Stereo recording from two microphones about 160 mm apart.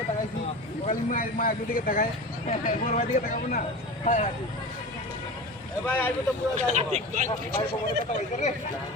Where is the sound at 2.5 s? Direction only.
50° left (ahead or behind).